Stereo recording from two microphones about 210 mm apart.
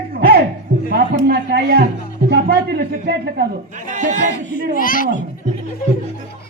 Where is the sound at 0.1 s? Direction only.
50° right (ahead or behind).